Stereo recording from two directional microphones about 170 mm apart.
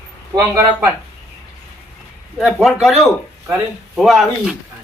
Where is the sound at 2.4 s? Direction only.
Centre (ahead or behind).